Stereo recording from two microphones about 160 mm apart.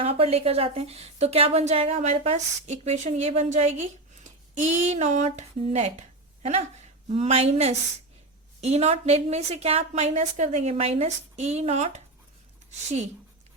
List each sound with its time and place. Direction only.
0.0 s a woman's voice: 40° right (ahead or behind)